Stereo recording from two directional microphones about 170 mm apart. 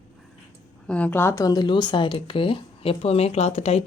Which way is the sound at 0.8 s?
5° left (ahead or behind).